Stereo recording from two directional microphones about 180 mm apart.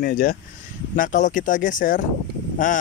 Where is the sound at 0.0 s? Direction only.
55° left (ahead or behind).